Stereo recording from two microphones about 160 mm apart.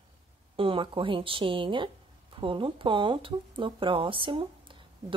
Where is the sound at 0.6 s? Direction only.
35° right (ahead or behind).